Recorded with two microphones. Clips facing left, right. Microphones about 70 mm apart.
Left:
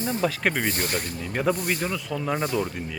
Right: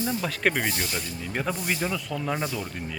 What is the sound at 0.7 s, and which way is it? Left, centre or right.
Speech, left.